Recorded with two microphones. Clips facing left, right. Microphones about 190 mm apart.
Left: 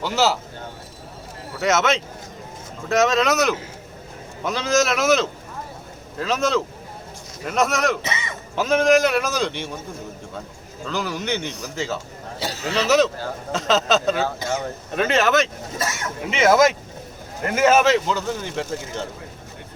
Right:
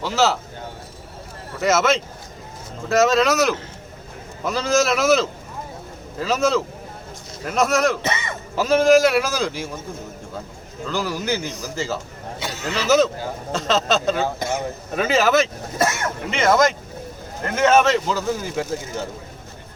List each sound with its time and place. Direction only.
0.0 s speech: centre (ahead or behind)
1.5 s speech: centre (ahead or behind)
8.0 s speech: 55° right (ahead or behind)
8.5 s speech: centre (ahead or behind)
10.8 s speech: centre (ahead or behind)
12.4 s a sound: 35° left (ahead or behind)
13.5 s speech: centre (ahead or behind)
15.8 s speech: 55° right (ahead or behind)
16.2 s speech: 5° left (ahead or behind)